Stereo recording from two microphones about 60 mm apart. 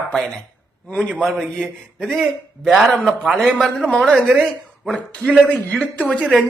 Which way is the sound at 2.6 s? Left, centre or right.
Centre.